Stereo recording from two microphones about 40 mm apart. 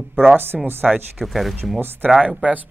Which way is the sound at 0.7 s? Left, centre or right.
Right.